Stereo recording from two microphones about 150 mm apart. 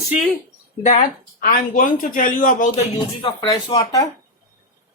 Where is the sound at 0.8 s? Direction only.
60° left (ahead or behind).